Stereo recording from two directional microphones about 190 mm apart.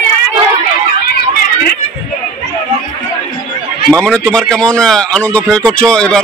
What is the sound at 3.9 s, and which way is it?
Speech, 5° left (ahead or behind).